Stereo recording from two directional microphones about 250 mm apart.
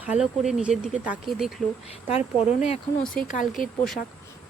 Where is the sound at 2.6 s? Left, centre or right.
Left.